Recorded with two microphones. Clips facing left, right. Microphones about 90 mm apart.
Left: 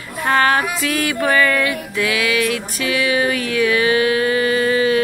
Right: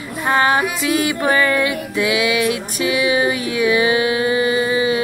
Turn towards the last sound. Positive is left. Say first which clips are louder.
# left 1 dB
turn(degrees=-15)  # may be behind; listen again after turning